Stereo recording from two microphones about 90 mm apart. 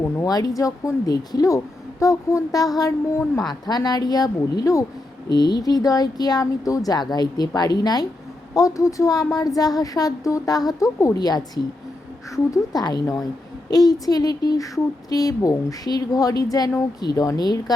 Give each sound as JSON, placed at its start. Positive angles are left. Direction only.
{"t": 0.3, "sound": "a woman's voice", "side_deg": 45}
{"t": 3.5, "sound": "speech", "side_deg": 50}
{"t": 5.3, "sound": "speech", "side_deg": 50}
{"t": 8.5, "sound": "a woman's voice", "side_deg": 40}